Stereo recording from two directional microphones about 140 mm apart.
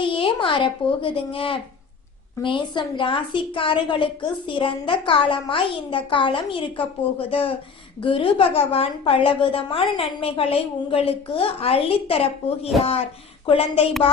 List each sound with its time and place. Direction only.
0.0 s a child's voice: 35° left (ahead or behind)